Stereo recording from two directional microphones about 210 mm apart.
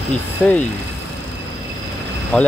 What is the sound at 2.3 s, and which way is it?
Speech, 5° left (ahead or behind).